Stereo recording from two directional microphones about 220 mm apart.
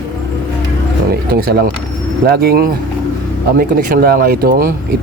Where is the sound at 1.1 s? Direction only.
45° right (ahead or behind).